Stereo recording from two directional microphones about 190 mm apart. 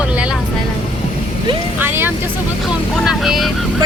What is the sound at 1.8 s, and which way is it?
Vehicle, 10° right (ahead or behind).